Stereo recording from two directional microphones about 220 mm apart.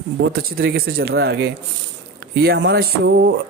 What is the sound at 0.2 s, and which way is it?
Speech, 45° right (ahead or behind).